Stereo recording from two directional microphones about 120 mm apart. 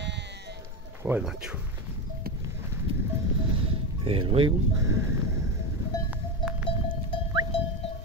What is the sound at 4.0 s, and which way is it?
Speech, 45° right (ahead or behind).